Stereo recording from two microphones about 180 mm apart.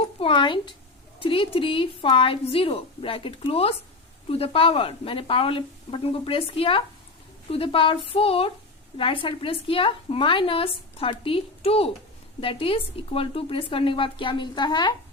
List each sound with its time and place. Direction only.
0.2 s a woman's voice: 30° left (ahead or behind)